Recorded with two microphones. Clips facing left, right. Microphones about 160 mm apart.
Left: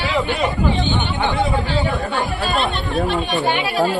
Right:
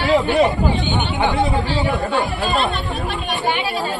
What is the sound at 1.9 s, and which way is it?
Speech, centre (ahead or behind).